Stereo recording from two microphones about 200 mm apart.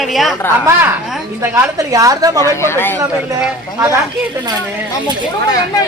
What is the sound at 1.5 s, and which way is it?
Speech, 15° right (ahead or behind).